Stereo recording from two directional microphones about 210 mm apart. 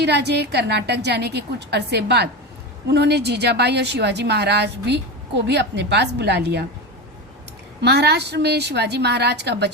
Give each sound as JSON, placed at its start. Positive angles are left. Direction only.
{"t": 0.0, "sound": "a woman's voice", "side_deg": -55}
{"t": 7.8, "sound": "a woman's voice", "side_deg": -50}